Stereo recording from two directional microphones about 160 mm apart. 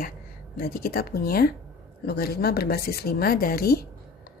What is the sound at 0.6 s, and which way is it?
Speech, 70° left (ahead or behind).